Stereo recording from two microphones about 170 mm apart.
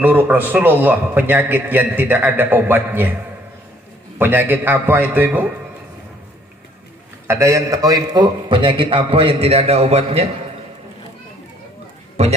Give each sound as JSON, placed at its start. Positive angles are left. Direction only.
{"t": 0.0, "sound": "a man's voice", "side_deg": -10}
{"t": 7.2, "sound": "a man's voice", "side_deg": -15}